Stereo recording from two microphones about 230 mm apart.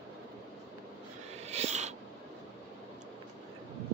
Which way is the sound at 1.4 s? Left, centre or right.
Right.